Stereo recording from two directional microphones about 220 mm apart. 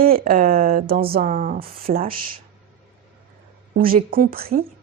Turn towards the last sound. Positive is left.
turn(degrees=-40)  # may be behind; listen again after turning